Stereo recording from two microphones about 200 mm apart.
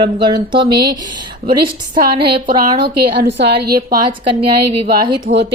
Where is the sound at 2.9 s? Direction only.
55° right (ahead or behind).